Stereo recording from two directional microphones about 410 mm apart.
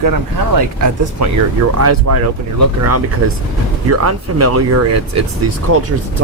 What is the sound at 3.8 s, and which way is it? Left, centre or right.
Speech, right.